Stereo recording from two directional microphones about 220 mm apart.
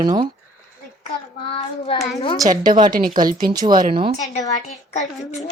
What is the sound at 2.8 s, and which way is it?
Speech, 40° right (ahead or behind).